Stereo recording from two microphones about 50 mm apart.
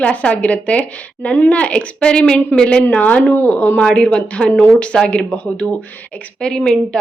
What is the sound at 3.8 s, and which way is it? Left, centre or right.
Speech, centre.